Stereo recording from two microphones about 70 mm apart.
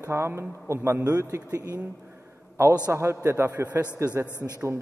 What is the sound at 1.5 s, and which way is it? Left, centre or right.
Speech, right.